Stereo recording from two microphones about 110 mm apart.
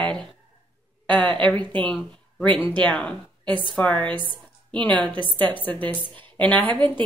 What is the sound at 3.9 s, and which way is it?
Speech, 45° right (ahead or behind).